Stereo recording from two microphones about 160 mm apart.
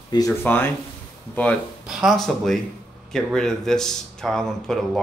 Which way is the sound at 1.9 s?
Centre (ahead or behind).